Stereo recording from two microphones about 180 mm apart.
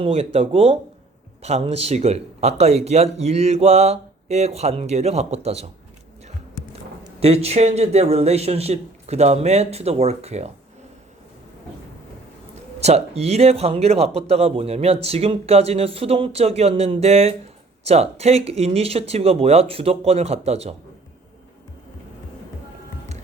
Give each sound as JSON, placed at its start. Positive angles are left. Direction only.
{"t": 0.0, "sound": "speech", "side_deg": -35}
{"t": 7.2, "sound": "speech", "side_deg": -35}
{"t": 12.8, "sound": "speech", "side_deg": -35}